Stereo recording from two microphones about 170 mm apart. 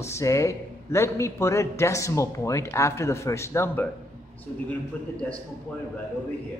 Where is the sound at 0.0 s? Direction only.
15° left (ahead or behind).